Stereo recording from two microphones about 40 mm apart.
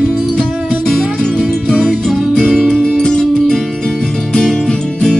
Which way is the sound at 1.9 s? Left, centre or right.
Centre.